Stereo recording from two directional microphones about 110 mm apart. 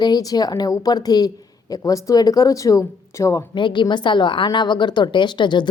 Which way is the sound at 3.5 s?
50° left (ahead or behind).